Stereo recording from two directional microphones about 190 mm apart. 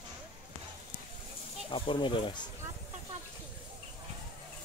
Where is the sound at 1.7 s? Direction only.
25° left (ahead or behind).